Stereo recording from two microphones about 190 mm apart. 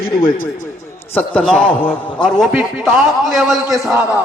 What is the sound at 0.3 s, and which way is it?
Speech, 50° left (ahead or behind).